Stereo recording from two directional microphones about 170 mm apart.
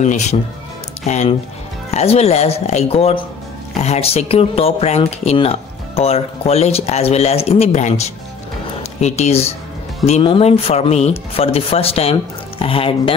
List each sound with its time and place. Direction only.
0.0 s speech: 40° left (ahead or behind)